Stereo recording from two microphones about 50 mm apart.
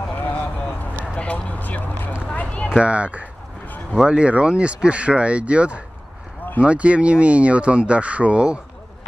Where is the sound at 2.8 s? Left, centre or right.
Right.